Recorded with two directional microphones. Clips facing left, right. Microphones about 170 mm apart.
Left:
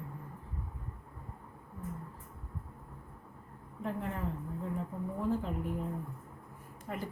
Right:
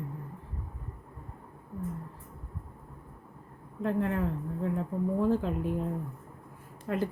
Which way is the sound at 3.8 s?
80° right.